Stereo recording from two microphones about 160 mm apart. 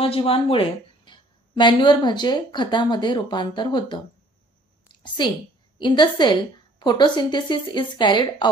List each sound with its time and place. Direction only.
0.0 s a woman's voice: 35° left (ahead or behind)
5.0 s a woman's voice: 30° left (ahead or behind)